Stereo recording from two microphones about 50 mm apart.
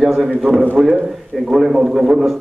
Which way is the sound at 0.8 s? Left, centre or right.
Centre.